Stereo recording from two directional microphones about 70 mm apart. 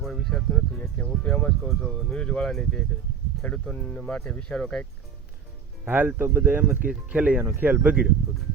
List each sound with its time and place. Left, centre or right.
0.0 s speech: centre
0.5 s speech: centre
1.6 s speech: centre
3.4 s speech: centre
5.8 s speech: right